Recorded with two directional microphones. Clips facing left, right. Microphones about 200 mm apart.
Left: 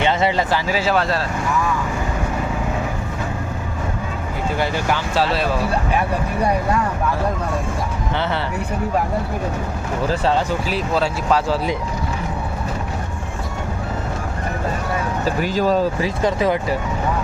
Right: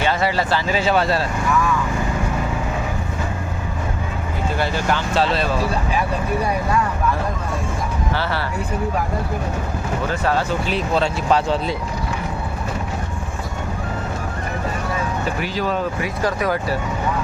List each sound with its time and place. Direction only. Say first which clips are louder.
0.0 s speech: left 2 dB; 20° left (ahead or behind)
0.7 s speech: right 1 dB; 5° left (ahead or behind)
4.5 s speech: even; 15° left (ahead or behind)
8.1 s speech: left 2 dB; 20° left (ahead or behind)
10.1 s speech: left 2 dB; 25° left (ahead or behind)
10.7 s speech: even; 5° left (ahead or behind)
15.2 s speech: left 4 dB; 40° left (ahead or behind); by 16.7 s 20° left (ahead or behind)